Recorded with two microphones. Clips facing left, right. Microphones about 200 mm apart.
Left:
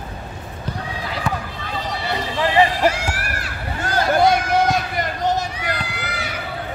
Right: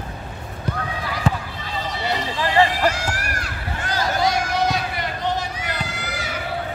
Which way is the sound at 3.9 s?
55° left (ahead or behind).